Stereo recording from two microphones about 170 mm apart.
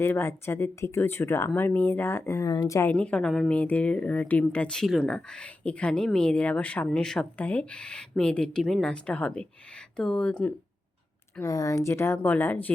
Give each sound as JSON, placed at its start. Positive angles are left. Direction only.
{"t": 0.0, "sound": "speech", "side_deg": 15}
{"t": 2.9, "sound": "speech", "side_deg": 5}
{"t": 11.3, "sound": "speech", "side_deg": 20}